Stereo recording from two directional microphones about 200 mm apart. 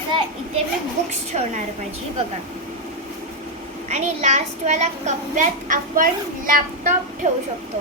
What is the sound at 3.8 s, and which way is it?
A child's voice, 30° right (ahead or behind).